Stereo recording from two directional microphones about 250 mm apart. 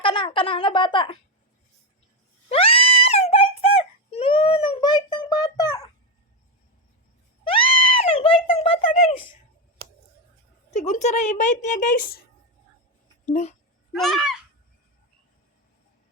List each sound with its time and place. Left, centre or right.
0.0 s speech: centre
2.5 s wail: left
7.4 s a sound: left
10.7 s a woman's voice: left
13.2 s speech: left
14.0 s speech: centre